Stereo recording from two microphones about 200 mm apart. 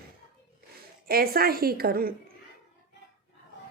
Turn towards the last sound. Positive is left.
turn(degrees=-50)  # may be behind; listen again after turning